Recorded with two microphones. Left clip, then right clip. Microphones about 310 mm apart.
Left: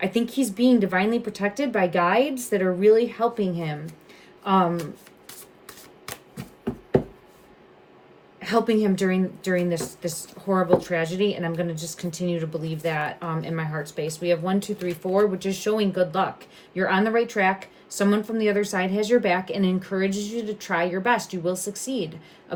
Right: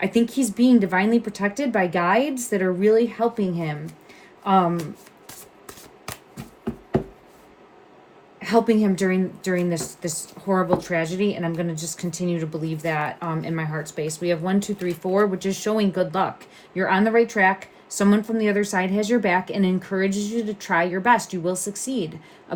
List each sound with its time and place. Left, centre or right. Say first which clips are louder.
0.0 s speech: right 3 dB; centre
8.4 s speech: right 2 dB; centre